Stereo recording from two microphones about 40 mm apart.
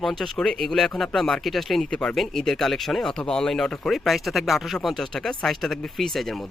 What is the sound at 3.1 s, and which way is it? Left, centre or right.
Speech, centre.